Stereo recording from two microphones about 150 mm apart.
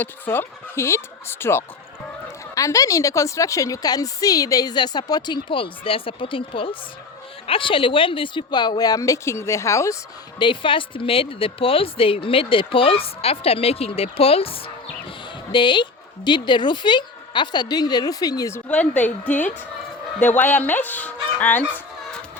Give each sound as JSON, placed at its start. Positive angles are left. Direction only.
{"t": 0.0, "sound": "a woman's voice", "side_deg": 15}
{"t": 10.3, "sound": "speech", "side_deg": 35}
{"t": 18.7, "sound": "speech", "side_deg": 10}